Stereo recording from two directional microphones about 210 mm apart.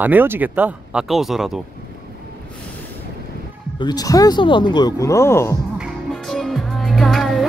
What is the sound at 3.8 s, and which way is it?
Speech, 20° left (ahead or behind).